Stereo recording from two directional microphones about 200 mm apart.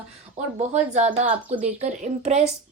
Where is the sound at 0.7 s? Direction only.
35° right (ahead or behind).